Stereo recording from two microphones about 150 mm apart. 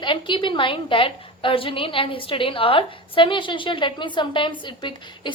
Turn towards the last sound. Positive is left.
turn(degrees=30)  # may be behind; listen again after turning